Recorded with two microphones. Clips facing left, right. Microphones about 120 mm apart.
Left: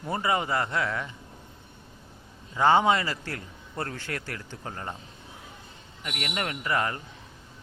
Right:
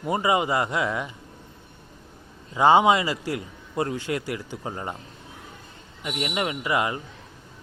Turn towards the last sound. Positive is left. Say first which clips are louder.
# right 3 dB
turn(degrees=-15)  # may be behind; listen again after turning